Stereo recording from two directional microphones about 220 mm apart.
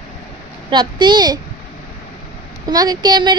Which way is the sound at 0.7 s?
20° right (ahead or behind).